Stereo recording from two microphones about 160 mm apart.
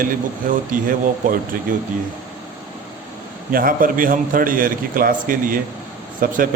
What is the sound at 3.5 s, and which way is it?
A man's voice, 60° right (ahead or behind).